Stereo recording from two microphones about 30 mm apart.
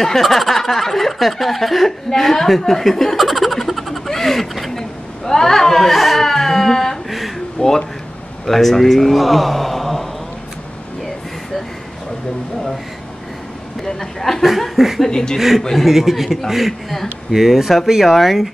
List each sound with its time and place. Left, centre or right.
0.2 s speech: centre
4.1 s a sound: centre
5.9 s speech: centre
6.2 s music: centre
7.1 s a sound: centre
7.6 s speech: left
8.5 s speech: centre
13.7 s music: centre
14.4 s speech: centre
15.0 s speech: left
15.3 s speech: centre